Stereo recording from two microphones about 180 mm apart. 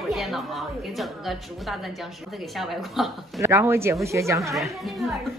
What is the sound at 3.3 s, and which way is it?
Speech, 15° right (ahead or behind).